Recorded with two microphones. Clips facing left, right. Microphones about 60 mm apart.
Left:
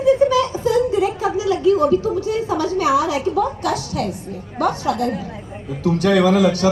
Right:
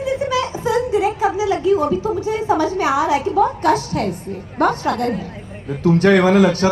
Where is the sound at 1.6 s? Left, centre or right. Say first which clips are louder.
Left 4 dB; right.